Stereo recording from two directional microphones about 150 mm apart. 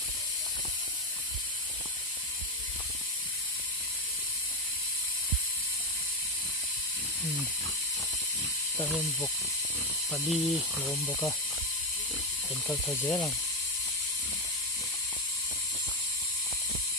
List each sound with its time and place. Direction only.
10.1 s speech: centre (ahead or behind)
12.6 s speech: 20° left (ahead or behind)